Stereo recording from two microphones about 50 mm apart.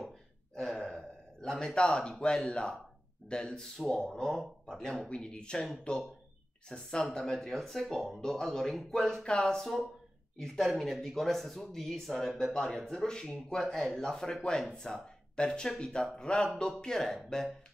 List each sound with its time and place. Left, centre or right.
0.6 s gasp: centre
1.4 s speech: centre